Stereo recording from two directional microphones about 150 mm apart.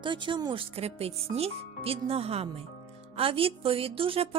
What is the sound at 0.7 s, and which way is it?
Speech, 40° right (ahead or behind).